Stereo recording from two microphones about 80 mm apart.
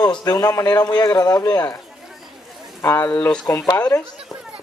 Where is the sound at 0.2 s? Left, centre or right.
Left.